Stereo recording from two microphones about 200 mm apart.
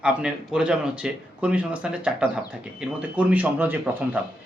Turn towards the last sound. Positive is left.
turn(degrees=-10)  # may be behind; listen again after turning